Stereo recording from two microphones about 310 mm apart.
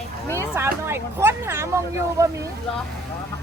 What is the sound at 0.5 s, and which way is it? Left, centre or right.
Speech, centre.